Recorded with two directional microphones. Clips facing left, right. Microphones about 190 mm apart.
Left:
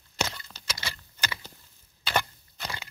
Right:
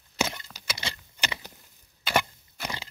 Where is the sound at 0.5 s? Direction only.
15° right (ahead or behind).